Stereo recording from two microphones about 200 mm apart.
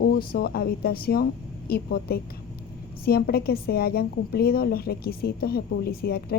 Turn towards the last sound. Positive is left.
turn(degrees=50)  # may be behind; listen again after turning